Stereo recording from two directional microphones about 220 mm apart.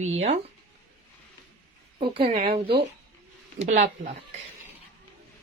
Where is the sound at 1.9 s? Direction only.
25° right (ahead or behind).